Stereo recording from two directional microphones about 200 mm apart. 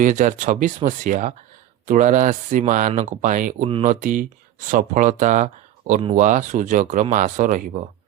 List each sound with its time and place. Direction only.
0.0 s speech: 40° right (ahead or behind)
3.7 s speech: 30° right (ahead or behind)
4.0 s speech: 40° right (ahead or behind)